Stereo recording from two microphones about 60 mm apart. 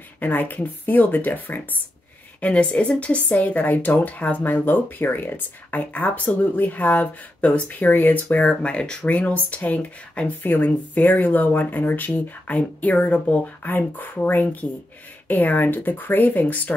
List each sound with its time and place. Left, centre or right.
0.2 s speech: left
2.4 s speech: left
8.5 s speech: centre